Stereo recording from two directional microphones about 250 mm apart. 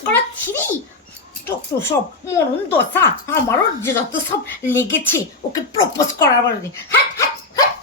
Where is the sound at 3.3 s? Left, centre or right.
Centre.